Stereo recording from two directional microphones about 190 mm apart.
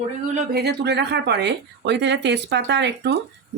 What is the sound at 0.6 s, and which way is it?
A woman's voice, 60° right (ahead or behind).